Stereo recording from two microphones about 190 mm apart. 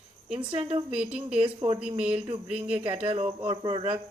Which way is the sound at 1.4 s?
30° right (ahead or behind).